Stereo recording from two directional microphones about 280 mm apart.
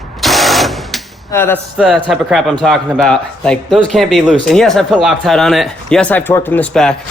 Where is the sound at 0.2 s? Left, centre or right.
Centre.